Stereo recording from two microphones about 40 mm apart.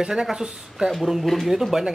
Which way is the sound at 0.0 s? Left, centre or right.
Centre.